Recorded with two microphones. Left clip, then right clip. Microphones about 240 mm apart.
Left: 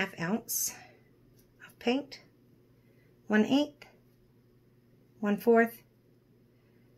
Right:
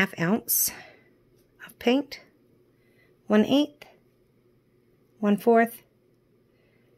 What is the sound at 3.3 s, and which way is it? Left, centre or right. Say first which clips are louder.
Speech: right 5 dB; right.